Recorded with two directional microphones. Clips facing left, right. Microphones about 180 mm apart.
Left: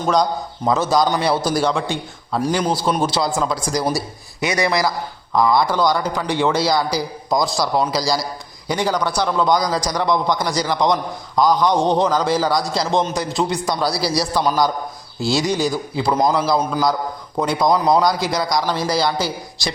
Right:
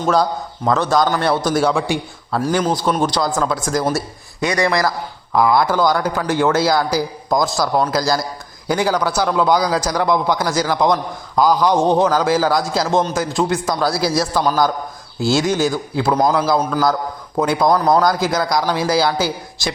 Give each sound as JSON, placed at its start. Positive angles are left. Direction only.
{"t": 0.1, "sound": "a man's voice", "side_deg": 0}
{"t": 4.4, "sound": "a man's voice", "side_deg": 20}
{"t": 5.3, "sound": "a man's voice", "side_deg": -5}
{"t": 17.3, "sound": "a man's voice", "side_deg": -5}